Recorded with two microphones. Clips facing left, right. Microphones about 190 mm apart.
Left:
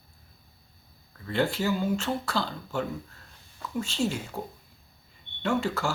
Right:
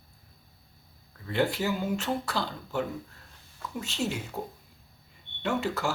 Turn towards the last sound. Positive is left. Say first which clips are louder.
# left 2 dB
turn(degrees=-20)  # may be behind; listen again after turning